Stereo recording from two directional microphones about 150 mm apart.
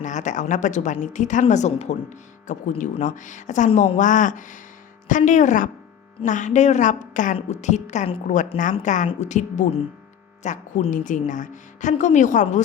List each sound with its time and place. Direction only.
0.0 s a woman's voice: 55° left (ahead or behind)